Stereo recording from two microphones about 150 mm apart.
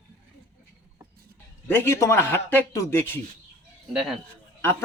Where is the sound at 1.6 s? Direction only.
15° left (ahead or behind).